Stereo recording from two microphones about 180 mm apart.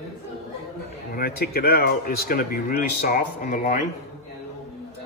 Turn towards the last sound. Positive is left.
turn(degrees=45)  # may be behind; listen again after turning